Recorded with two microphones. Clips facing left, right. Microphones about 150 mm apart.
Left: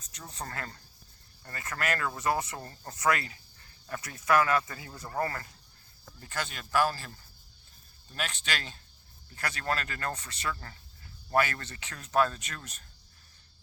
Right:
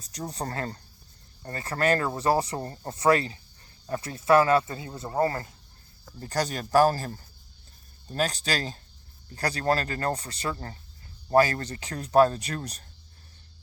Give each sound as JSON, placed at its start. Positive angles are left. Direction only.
{"t": 0.0, "sound": "speech", "side_deg": -35}
{"t": 6.1, "sound": "speech", "side_deg": -40}